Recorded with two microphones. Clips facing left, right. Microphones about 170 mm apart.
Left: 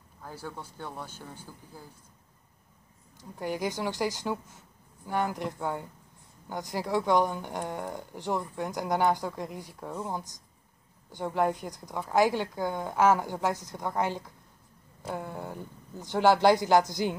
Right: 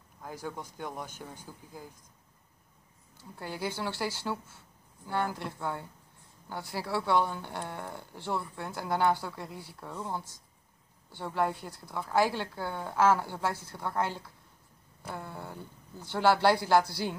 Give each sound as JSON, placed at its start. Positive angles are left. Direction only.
{"t": 0.2, "sound": "speech", "side_deg": -15}
{"t": 3.2, "sound": "a woman's voice", "side_deg": 15}